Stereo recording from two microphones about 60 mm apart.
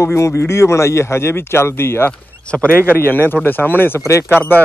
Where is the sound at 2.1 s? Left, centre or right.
Centre.